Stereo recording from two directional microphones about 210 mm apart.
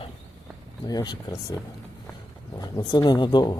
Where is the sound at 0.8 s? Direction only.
20° left (ahead or behind).